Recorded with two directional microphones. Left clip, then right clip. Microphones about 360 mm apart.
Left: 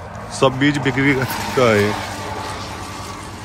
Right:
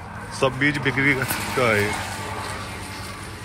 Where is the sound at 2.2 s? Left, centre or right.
Left.